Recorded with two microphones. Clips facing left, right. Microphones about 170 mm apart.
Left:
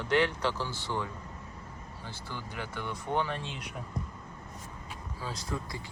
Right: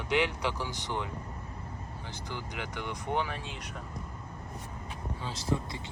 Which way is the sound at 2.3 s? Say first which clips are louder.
Right 1 dB; 15° right (ahead or behind).